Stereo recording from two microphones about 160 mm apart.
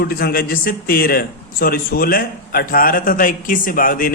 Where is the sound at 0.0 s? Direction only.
75° left (ahead or behind).